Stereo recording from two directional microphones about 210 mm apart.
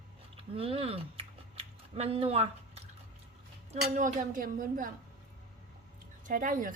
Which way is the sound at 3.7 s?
40° right (ahead or behind).